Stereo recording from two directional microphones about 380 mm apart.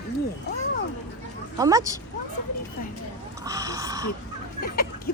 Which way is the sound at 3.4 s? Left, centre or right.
Centre.